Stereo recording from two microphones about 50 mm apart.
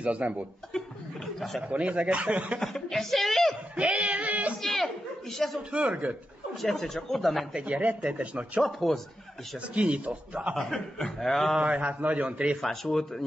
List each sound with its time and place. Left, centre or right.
0.0 s speech: right
0.7 s chuckle: centre
1.6 s speech: right
2.6 s speech: centre
3.7 s speech: right
4.6 s a sound: centre
5.7 s speech: right
6.5 s speech: centre
7.5 s speech: right
8.5 s speech: centre
9.6 s speech: right
10.5 s speech: centre
11.6 s speech: right
12.6 s speech: centre